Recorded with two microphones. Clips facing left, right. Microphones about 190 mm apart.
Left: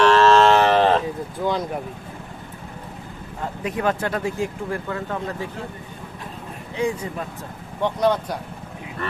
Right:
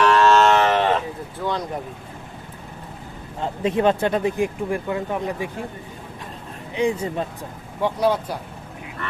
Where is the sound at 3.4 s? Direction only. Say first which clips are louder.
Right 5 dB; 25° right (ahead or behind).